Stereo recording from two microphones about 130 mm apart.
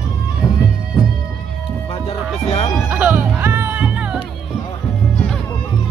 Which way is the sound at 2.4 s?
50° left (ahead or behind).